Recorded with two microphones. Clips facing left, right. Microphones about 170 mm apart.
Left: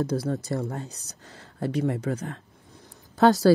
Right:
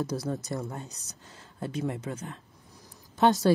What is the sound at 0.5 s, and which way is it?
Speech, 65° left (ahead or behind).